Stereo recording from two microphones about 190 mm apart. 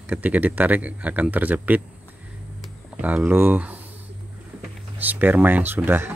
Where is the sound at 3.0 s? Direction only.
10° right (ahead or behind).